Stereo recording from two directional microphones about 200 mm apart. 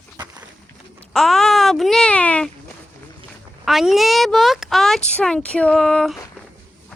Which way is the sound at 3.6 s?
Centre (ahead or behind).